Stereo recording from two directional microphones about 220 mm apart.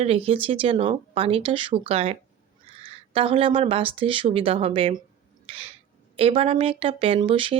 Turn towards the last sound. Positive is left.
turn(degrees=-25)  # may be behind; listen again after turning